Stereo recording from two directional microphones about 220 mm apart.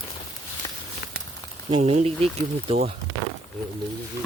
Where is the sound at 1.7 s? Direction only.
30° right (ahead or behind).